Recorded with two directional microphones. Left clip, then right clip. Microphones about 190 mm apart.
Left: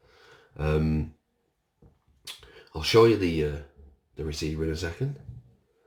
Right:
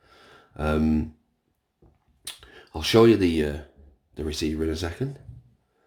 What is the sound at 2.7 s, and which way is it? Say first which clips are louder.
Speech: right 2 dB; 50° right (ahead or behind).